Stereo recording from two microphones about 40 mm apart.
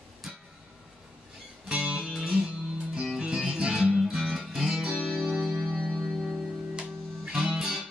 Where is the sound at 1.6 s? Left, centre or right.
Right.